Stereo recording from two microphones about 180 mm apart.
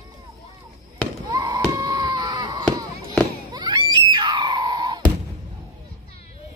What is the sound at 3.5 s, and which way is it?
Screaming, 25° right (ahead or behind).